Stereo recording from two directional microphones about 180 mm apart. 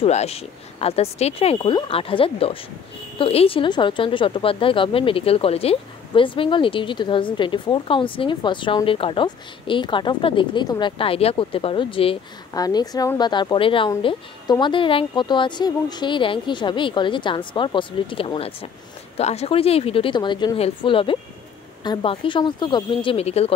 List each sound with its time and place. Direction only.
0.0 s a woman's voice: 35° left (ahead or behind)